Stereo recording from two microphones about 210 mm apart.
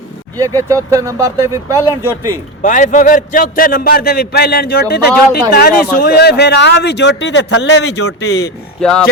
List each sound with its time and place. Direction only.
0.3 s speech: 15° right (ahead or behind)
2.6 s a man's voice: 40° left (ahead or behind); by 7.9 s 55° left (ahead or behind)
7.9 s a man's voice: 90° left
8.8 s speech: 5° left (ahead or behind)